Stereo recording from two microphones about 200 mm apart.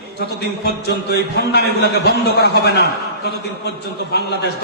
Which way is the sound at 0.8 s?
55° left (ahead or behind).